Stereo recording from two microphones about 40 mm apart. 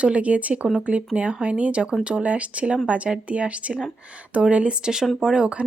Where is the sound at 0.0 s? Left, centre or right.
Right.